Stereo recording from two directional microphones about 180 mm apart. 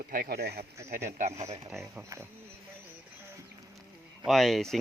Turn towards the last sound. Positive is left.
turn(degrees=0)  # may be behind; listen again after turning